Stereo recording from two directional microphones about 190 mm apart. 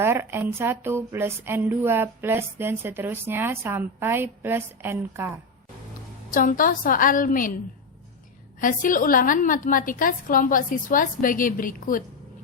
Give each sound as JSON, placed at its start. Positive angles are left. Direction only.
{"t": 0.0, "sound": "speech", "side_deg": -15}
{"t": 6.3, "sound": "a woman's voice", "side_deg": 45}
{"t": 8.6, "sound": "a woman's voice", "side_deg": 45}